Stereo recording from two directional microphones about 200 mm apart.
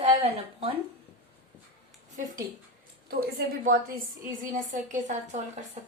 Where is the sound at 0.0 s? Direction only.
30° right (ahead or behind).